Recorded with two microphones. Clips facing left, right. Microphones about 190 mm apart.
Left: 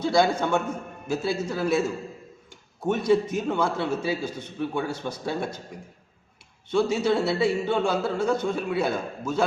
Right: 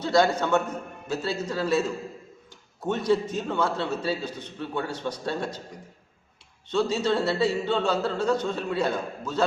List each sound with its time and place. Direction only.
0.0 s a man's voice: 10° left (ahead or behind)
6.7 s a man's voice: 10° left (ahead or behind)